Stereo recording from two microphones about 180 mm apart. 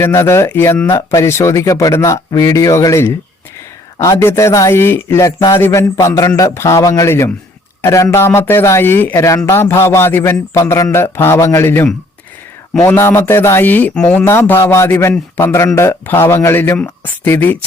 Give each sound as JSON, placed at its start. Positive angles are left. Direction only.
{"t": 0.0, "sound": "speech", "side_deg": 15}